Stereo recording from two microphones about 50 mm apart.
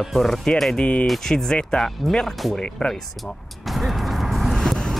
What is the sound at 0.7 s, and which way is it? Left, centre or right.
Speech, left.